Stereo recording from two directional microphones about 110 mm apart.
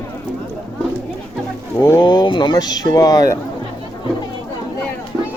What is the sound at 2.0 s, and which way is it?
Speech, 40° left (ahead or behind).